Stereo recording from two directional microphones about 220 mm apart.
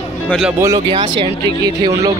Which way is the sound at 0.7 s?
20° right (ahead or behind).